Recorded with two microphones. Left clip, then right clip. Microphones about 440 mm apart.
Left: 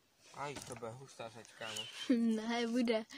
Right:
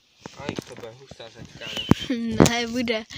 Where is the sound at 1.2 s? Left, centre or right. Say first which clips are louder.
Right 8 dB; left.